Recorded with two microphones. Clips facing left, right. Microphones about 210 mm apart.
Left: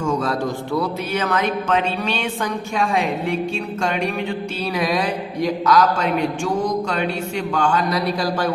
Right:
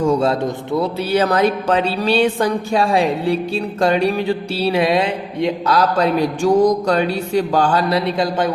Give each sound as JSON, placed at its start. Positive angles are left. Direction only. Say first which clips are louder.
{"t": 0.0, "sound": "a man's voice", "louder": "right 5 dB", "side_deg": -30}
{"t": 1.1, "sound": "a woman's voice", "louder": "right 7 dB", "side_deg": -35}